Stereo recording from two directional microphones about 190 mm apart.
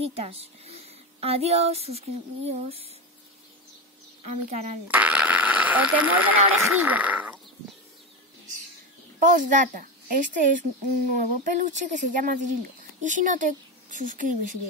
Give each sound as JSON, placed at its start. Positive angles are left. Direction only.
{"t": 0.0, "sound": "a woman's voice", "side_deg": -30}
{"t": 4.2, "sound": "a woman's voice", "side_deg": -40}
{"t": 4.8, "sound": "speech", "side_deg": -10}
{"t": 9.2, "sound": "speech", "side_deg": -45}